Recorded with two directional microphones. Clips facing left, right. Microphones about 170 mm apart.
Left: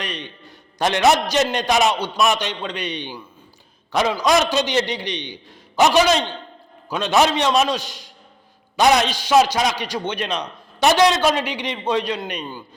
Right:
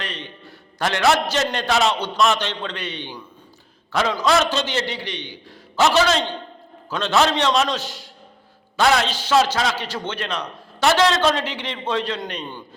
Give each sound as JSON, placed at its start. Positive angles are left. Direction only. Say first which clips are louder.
{"t": 0.0, "sound": "a man's voice", "louder": "left 2 dB", "side_deg": 15}